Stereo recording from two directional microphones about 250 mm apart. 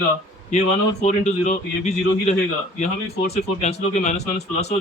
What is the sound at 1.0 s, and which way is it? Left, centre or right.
Speech, left.